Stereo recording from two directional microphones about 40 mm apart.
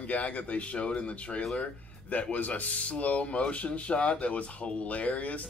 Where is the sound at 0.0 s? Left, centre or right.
Left.